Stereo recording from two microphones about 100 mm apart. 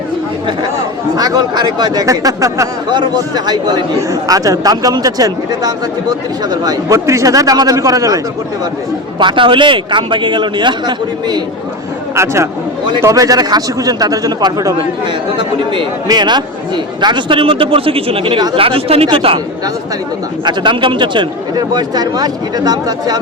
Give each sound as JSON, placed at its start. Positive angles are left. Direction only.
{"t": 1.1, "sound": "speech", "side_deg": -40}
{"t": 9.1, "sound": "speech", "side_deg": -55}
{"t": 12.1, "sound": "speech", "side_deg": -30}
{"t": 14.8, "sound": "a man's voice", "side_deg": -55}
{"t": 16.0, "sound": "a man's voice", "side_deg": -45}
{"t": 20.4, "sound": "speech", "side_deg": -50}